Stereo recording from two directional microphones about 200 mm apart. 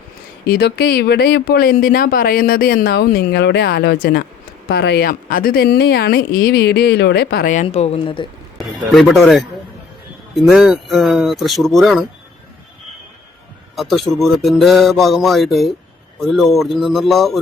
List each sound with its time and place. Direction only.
0.4 s speech: 50° left (ahead or behind); by 8.3 s 25° left (ahead or behind)
8.5 s speech: centre (ahead or behind)
13.7 s speech: centre (ahead or behind)